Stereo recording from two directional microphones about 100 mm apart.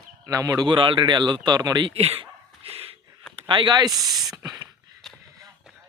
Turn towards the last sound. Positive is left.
turn(degrees=0)  # may be behind; listen again after turning